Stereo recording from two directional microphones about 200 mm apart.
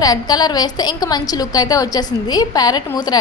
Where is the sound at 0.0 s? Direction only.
20° left (ahead or behind).